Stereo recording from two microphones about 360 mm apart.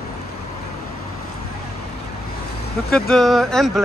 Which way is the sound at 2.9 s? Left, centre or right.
Centre.